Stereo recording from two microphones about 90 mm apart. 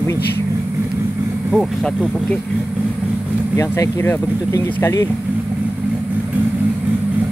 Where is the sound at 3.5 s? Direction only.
35° left (ahead or behind).